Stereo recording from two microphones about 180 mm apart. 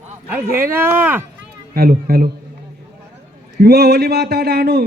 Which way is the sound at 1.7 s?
55° right (ahead or behind).